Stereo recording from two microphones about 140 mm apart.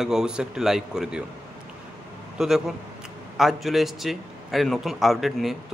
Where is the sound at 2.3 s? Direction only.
5° right (ahead or behind).